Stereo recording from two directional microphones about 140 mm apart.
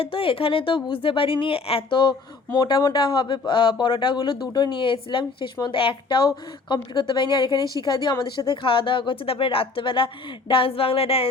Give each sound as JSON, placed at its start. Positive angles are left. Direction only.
{"t": 0.0, "sound": "speech", "side_deg": 40}